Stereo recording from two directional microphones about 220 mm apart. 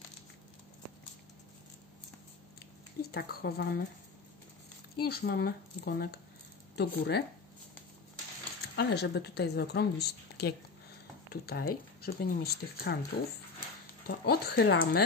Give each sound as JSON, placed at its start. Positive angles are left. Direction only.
{"t": 3.1, "sound": "speech", "side_deg": 45}
{"t": 4.9, "sound": "speech", "side_deg": 45}
{"t": 8.7, "sound": "speech", "side_deg": 50}